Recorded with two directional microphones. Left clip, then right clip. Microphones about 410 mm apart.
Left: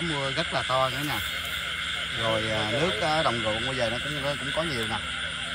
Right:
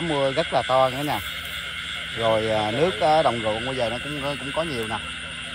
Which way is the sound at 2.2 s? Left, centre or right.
Centre.